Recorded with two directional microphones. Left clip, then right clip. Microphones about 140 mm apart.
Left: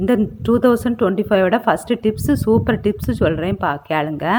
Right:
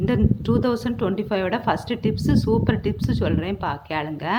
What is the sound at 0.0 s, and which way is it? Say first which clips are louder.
A woman's voice: left 5 dB; 40° left (ahead or behind).